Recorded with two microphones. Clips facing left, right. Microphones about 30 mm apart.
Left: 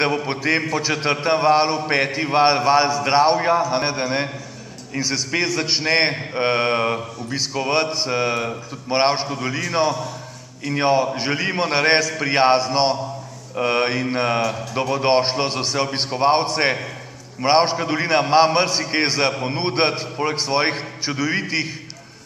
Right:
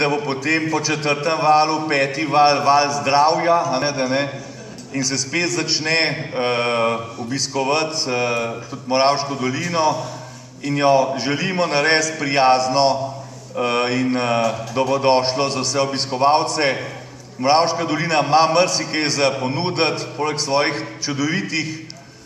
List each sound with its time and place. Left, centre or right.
0.3 s a man's voice: centre
7.3 s a man's voice: centre